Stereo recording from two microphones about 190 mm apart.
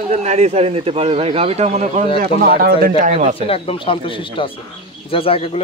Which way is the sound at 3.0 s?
35° right (ahead or behind).